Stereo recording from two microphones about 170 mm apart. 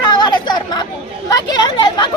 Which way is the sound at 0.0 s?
25° left (ahead or behind).